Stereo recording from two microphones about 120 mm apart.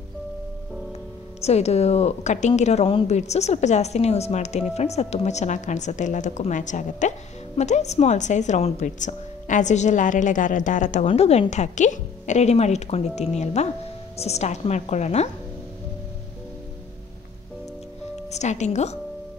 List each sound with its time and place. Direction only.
1.4 s a woman's voice: 65° left (ahead or behind); by 11.1 s 90° left
11.1 s a woman's voice: 60° left (ahead or behind)
18.3 s a woman's voice: 75° left (ahead or behind)